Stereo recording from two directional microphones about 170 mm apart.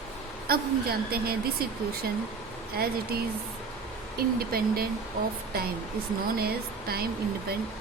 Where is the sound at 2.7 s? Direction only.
65° right (ahead or behind).